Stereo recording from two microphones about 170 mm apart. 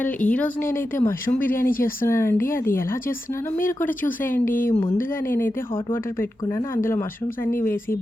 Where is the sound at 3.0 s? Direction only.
55° left (ahead or behind).